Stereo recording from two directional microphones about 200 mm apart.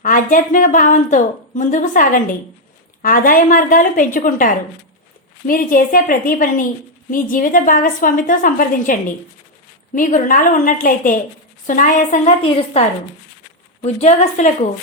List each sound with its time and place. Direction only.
0.0 s a woman's voice: 40° left (ahead or behind)